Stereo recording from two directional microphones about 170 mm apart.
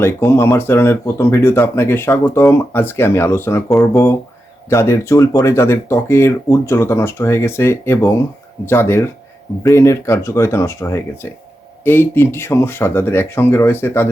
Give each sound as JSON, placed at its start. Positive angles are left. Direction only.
{"t": 0.0, "sound": "speech", "side_deg": 15}
{"t": 4.7, "sound": "speech", "side_deg": 15}